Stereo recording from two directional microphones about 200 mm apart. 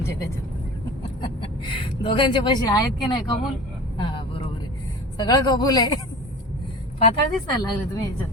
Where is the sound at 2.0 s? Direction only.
25° left (ahead or behind).